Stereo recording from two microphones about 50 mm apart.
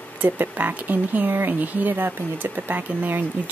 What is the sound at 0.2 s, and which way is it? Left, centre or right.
Speech, right.